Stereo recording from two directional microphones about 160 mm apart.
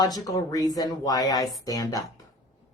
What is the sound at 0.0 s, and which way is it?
Speech, 25° left (ahead or behind).